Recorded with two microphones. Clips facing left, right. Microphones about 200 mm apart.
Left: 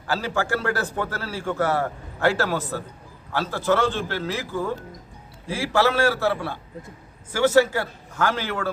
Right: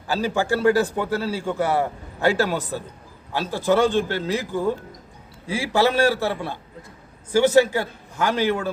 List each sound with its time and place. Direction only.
0.1 s a man's voice: 15° right (ahead or behind)